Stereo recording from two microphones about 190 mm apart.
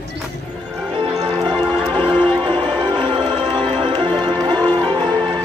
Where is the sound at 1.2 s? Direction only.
25° right (ahead or behind).